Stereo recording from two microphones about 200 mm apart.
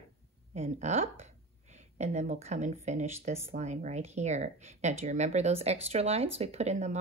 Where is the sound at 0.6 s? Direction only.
35° right (ahead or behind).